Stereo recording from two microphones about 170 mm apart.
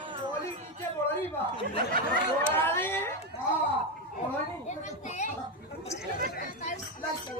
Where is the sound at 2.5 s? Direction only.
15° left (ahead or behind).